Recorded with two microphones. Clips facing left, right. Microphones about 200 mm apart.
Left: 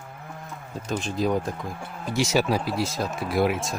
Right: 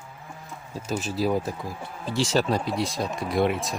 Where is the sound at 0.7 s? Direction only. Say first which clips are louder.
Even; 5° right (ahead or behind).